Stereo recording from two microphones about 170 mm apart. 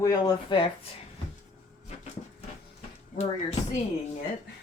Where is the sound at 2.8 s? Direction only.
40° left (ahead or behind).